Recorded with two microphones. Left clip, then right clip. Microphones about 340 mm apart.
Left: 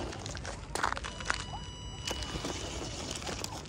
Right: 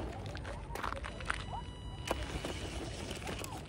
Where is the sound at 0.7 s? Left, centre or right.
Left.